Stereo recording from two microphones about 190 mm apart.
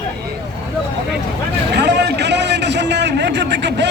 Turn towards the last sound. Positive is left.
turn(degrees=-65)  # may be behind; listen again after turning